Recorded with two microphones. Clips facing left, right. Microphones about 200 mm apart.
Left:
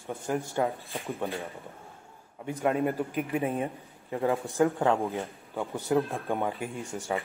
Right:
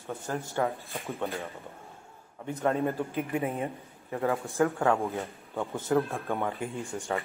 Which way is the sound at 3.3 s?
30° left (ahead or behind).